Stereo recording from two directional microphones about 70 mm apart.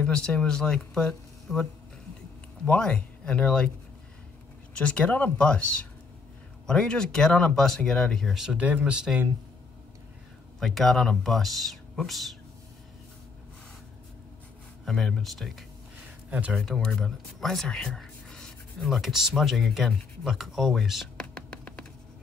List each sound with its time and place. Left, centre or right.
0.0 s speech: centre
4.7 s speech: centre
8.5 s speech: centre
10.6 s speech: centre
14.9 s speech: centre
16.3 s speech: centre
16.5 s speech: centre
21.2 s music: centre